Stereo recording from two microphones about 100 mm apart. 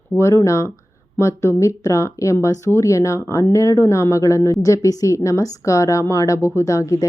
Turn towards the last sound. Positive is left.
turn(degrees=35)  # may be behind; listen again after turning